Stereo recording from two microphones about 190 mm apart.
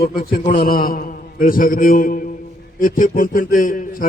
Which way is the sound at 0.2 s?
50° left (ahead or behind).